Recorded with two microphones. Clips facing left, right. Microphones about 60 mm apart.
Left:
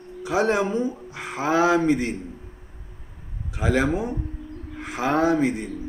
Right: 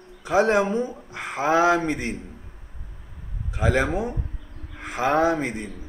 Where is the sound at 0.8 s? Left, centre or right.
Right.